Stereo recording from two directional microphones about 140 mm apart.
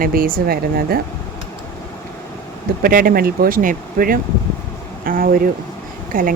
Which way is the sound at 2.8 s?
85° right.